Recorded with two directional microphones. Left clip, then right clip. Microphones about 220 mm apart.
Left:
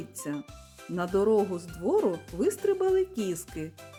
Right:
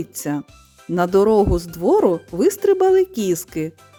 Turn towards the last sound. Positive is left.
turn(degrees=-40)  # may be behind; listen again after turning